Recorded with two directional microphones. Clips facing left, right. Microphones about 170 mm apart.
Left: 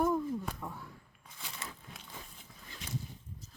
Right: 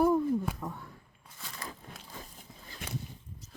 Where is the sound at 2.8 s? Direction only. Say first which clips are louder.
Right 1 dB; 60° right (ahead or behind).